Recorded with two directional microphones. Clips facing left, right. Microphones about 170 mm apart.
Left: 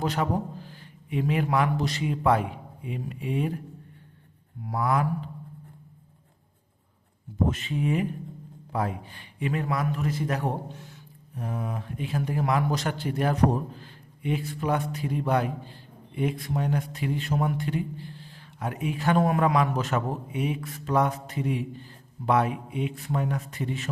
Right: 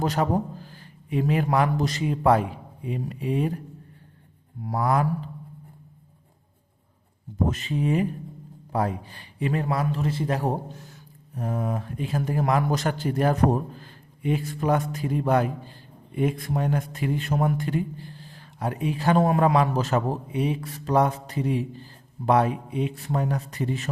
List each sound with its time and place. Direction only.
0.0 s a man's voice: 40° right (ahead or behind)
4.6 s a man's voice: 40° right (ahead or behind)
7.5 s a man's voice: 35° right (ahead or behind)